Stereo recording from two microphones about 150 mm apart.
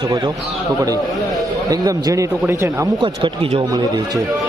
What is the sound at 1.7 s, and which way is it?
Speech, 25° right (ahead or behind).